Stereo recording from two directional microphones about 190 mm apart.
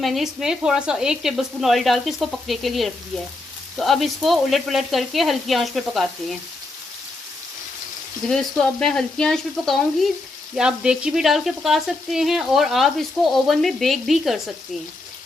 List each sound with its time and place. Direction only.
0.0 s speech: centre (ahead or behind)
8.3 s speech: 5° left (ahead or behind)